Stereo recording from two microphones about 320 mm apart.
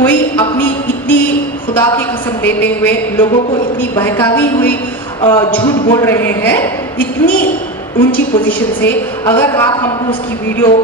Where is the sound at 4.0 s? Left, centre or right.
Centre.